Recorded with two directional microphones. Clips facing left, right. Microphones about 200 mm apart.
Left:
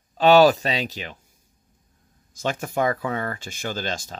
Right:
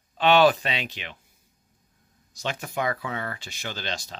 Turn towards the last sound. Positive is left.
turn(degrees=45)  # may be behind; listen again after turning